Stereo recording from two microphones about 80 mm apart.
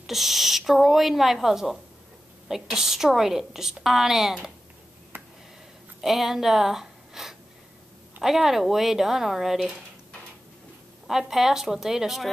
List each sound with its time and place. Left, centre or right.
0.0 s a woman's voice: centre
5.1 s a sound: right
5.9 s a woman's voice: centre
11.1 s a woman's voice: centre